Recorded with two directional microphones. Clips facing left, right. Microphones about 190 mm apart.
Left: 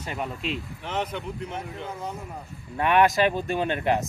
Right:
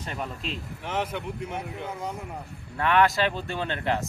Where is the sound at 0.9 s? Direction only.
10° right (ahead or behind).